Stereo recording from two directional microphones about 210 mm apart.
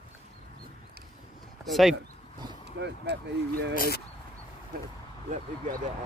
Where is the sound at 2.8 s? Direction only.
55° right (ahead or behind).